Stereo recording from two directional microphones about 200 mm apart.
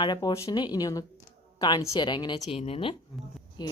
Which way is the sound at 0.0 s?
20° left (ahead or behind).